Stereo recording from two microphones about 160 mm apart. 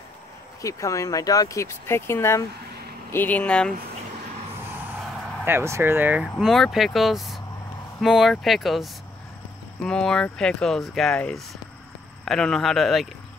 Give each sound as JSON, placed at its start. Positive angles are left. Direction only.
{"t": 0.6, "sound": "speech", "side_deg": 20}
{"t": 5.4, "sound": "speech", "side_deg": -15}
{"t": 6.2, "sound": "speech", "side_deg": 0}